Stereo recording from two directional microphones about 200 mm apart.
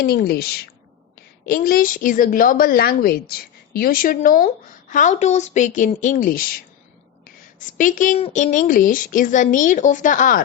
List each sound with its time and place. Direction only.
0.0 s a woman's voice: 45° left (ahead or behind)
7.7 s speech: 40° left (ahead or behind)